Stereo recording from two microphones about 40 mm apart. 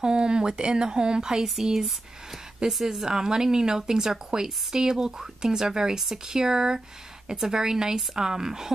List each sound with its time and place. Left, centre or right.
0.0 s a woman's voice: right